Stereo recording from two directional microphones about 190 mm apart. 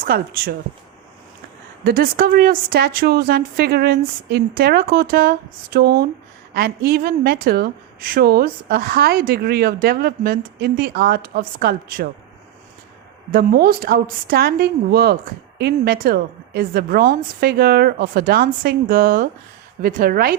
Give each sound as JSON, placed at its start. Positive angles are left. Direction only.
{"t": 0.0, "sound": "a woman's voice", "side_deg": -50}
{"t": 1.8, "sound": "a woman's voice", "side_deg": -50}
{"t": 13.3, "sound": "a woman's voice", "side_deg": -50}